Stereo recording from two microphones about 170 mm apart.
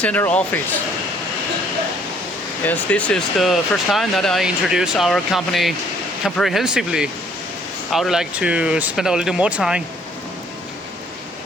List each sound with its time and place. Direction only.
0.0 s speech: 10° left (ahead or behind)
2.6 s speech: 10° left (ahead or behind)